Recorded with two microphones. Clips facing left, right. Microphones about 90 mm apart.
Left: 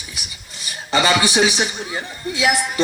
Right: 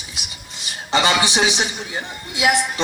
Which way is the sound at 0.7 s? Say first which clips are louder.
Left 1 dB; 20° right (ahead or behind).